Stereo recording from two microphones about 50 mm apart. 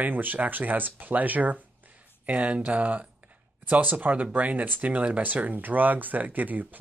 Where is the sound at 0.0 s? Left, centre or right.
Right.